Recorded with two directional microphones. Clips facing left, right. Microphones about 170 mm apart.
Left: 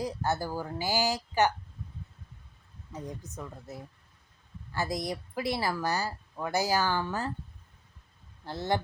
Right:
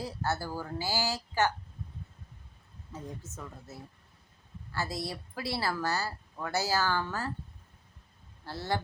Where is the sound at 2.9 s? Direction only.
15° left (ahead or behind).